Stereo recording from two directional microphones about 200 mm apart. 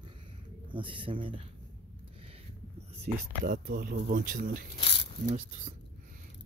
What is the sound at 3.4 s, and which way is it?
Speech, 50° right (ahead or behind).